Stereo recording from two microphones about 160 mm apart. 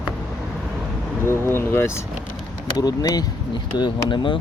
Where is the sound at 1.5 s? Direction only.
15° left (ahead or behind); by 4.3 s 30° left (ahead or behind).